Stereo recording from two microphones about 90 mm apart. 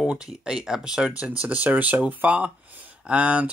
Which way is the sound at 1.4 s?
20° right (ahead or behind).